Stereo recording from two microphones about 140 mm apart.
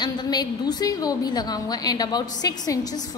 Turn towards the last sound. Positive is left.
turn(degrees=25)  # may be behind; listen again after turning